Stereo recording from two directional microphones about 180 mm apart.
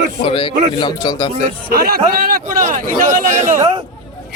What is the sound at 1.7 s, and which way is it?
A man's voice, 60° right (ahead or behind).